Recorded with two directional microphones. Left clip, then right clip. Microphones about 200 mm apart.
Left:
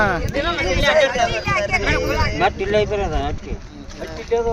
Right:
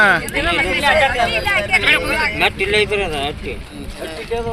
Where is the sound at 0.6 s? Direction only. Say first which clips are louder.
Right 1 dB; 50° left (ahead or behind).